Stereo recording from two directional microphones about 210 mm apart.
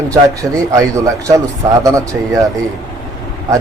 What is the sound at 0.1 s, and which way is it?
Speech, 15° right (ahead or behind).